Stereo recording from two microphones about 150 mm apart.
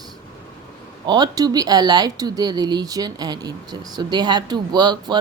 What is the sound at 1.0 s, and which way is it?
Speech, 30° right (ahead or behind).